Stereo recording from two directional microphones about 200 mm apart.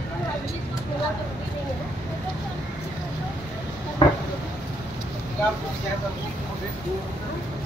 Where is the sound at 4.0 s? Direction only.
25° left (ahead or behind).